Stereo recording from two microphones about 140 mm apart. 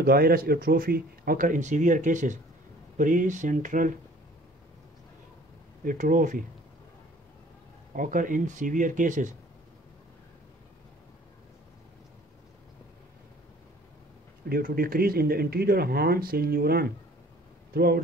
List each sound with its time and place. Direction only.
0.0 s speech: 90° right; by 4.0 s 70° right (ahead or behind)
5.9 s speech: 75° right (ahead or behind)
7.9 s speech: 70° right (ahead or behind)
14.5 s speech: 90° right